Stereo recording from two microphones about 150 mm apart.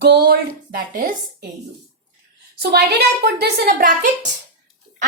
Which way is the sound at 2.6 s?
90° right.